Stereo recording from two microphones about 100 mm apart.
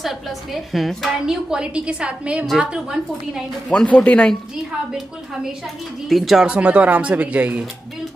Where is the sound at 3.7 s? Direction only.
10° left (ahead or behind).